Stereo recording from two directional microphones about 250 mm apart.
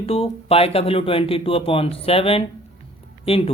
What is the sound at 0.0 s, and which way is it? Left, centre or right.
A woman's voice, left.